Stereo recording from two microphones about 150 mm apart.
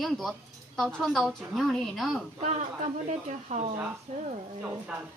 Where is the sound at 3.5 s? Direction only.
50° right (ahead or behind).